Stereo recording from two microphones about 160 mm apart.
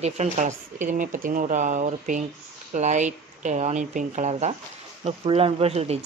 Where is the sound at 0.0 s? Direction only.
45° right (ahead or behind).